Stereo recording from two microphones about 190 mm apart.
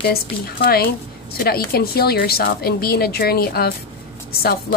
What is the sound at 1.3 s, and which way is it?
A woman's voice, 55° left (ahead or behind).